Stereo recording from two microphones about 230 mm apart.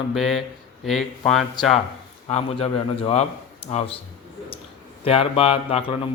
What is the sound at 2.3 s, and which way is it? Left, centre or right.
Speech, left.